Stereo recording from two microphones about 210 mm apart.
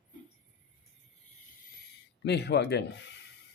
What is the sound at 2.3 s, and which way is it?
Speech, 55° left (ahead or behind).